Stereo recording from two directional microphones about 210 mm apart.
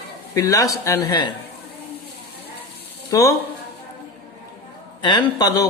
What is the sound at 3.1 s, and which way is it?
Speech, 15° left (ahead or behind).